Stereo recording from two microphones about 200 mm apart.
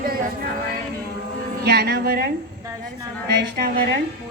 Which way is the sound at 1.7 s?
55° right (ahead or behind).